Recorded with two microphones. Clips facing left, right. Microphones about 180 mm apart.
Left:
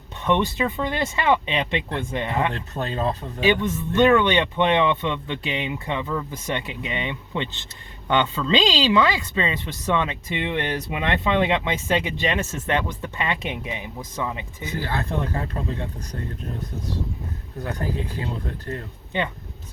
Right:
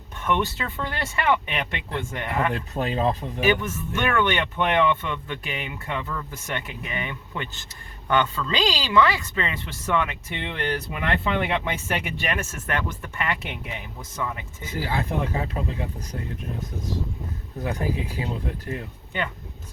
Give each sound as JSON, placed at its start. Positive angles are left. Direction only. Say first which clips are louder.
{"t": 0.2, "sound": "a woman's voice", "louder": "left 4 dB", "side_deg": 20}
{"t": 2.5, "sound": "speech", "louder": "right 2 dB", "side_deg": -10}
{"t": 3.4, "sound": "a woman's voice", "louder": "left 2 dB", "side_deg": 20}
{"t": 14.8, "sound": "speech", "louder": "right 1 dB", "side_deg": -10}
{"t": 17.6, "sound": "speech", "louder": "right 1 dB", "side_deg": -10}